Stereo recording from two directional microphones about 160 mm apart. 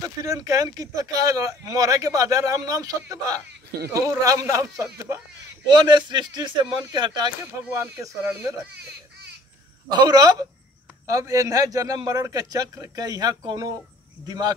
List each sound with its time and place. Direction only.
0.0 s speech: 20° right (ahead or behind)
7.7 s speech: 15° right (ahead or behind)
9.8 s speech: 25° right (ahead or behind)